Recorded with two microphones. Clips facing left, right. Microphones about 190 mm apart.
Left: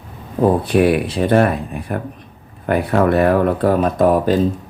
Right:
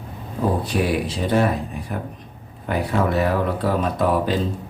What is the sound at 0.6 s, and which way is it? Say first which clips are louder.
Speech: left 7 dB; 60° left (ahead or behind).